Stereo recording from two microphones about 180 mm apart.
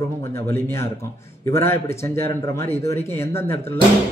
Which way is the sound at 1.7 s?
15° left (ahead or behind).